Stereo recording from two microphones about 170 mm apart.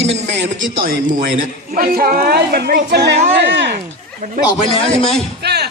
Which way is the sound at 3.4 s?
85° right.